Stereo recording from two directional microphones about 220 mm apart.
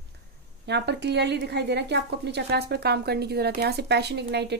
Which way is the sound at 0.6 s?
50° right (ahead or behind).